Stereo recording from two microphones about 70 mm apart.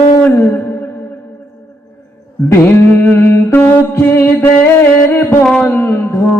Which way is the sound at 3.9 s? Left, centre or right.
Left.